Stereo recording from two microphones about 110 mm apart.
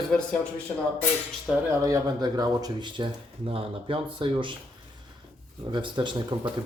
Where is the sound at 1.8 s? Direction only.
35° right (ahead or behind).